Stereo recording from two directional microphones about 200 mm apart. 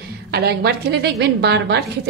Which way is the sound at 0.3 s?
55° right (ahead or behind).